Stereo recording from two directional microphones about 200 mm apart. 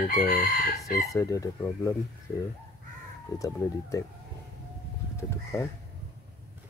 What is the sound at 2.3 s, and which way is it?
Speech, 30° left (ahead or behind).